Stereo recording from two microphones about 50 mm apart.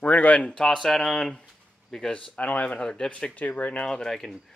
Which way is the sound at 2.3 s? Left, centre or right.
Left.